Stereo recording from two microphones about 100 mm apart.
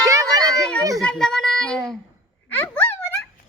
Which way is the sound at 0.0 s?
35° right (ahead or behind).